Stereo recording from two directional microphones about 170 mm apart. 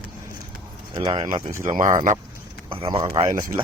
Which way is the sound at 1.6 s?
50° right (ahead or behind).